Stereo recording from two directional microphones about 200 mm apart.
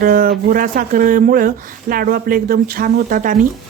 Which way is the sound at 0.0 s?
45° right (ahead or behind).